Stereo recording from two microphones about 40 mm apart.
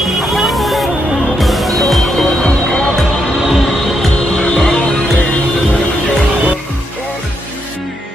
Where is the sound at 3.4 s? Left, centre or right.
Centre.